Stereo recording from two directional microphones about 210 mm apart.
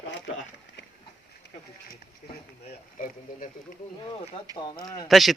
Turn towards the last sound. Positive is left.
turn(degrees=0)  # may be behind; listen again after turning